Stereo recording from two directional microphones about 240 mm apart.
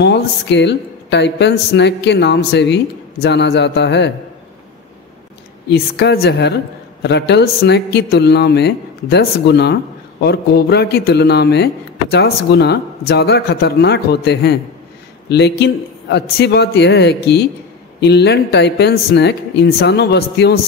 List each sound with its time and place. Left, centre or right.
0.0 s speech: left
5.7 s speech: left